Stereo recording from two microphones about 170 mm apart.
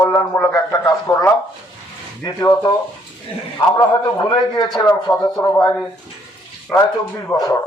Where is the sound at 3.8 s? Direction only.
25° left (ahead or behind).